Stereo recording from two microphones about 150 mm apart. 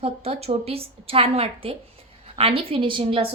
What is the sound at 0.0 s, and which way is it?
A woman's voice, 45° right (ahead or behind).